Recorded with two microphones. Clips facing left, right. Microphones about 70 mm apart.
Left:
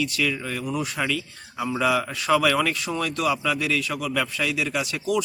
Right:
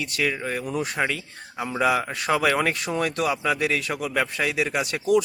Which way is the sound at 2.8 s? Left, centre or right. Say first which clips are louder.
Right 1 dB; right.